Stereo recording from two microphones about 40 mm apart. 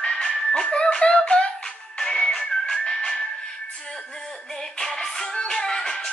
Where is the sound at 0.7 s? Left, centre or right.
Left.